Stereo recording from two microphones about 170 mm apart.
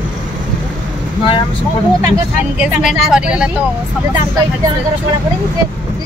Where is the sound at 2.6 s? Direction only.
Centre (ahead or behind).